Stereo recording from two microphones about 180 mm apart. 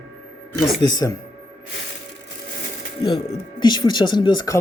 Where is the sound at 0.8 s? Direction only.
20° left (ahead or behind).